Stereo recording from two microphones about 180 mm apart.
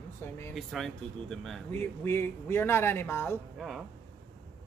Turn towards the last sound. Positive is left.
turn(degrees=15)  # may be behind; listen again after turning